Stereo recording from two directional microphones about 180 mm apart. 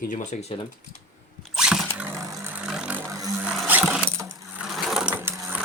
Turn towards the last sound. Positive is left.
turn(degrees=-10)  # may be behind; listen again after turning